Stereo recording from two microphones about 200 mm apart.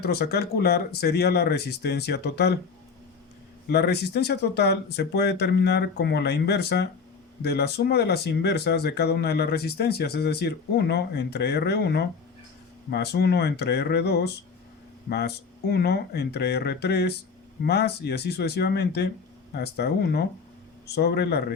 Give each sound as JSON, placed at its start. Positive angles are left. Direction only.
{"t": 0.0, "sound": "speech", "side_deg": 50}
{"t": 3.7, "sound": "speech", "side_deg": 55}